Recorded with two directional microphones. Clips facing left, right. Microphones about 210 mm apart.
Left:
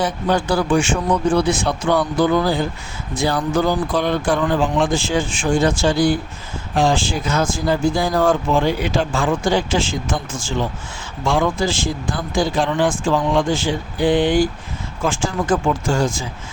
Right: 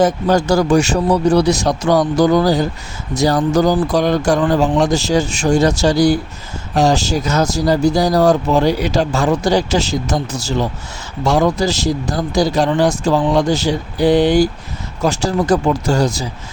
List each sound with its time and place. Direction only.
0.0 s speech: 45° right (ahead or behind)